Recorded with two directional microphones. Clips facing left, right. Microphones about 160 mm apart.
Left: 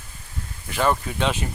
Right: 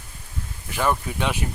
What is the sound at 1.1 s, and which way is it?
Speech, 10° right (ahead or behind).